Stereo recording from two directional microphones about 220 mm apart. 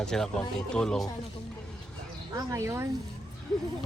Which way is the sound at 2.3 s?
15° right (ahead or behind).